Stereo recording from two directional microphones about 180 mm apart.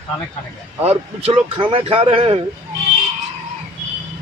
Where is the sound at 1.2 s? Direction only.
30° right (ahead or behind).